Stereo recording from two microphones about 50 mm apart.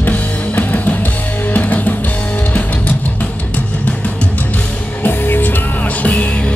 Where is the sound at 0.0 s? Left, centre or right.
Left.